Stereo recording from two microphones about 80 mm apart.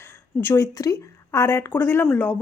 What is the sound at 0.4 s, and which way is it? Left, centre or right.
A woman's voice, left.